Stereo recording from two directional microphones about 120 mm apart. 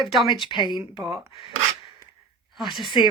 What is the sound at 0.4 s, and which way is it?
A woman's voice, 40° left (ahead or behind).